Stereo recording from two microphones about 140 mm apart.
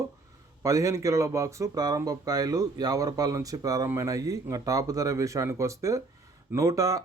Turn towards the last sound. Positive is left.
turn(degrees=-25)  # may be behind; listen again after turning